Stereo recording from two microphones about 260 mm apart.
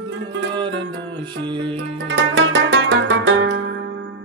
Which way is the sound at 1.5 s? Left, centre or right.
Centre.